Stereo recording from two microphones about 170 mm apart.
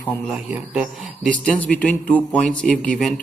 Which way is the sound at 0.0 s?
5° left (ahead or behind).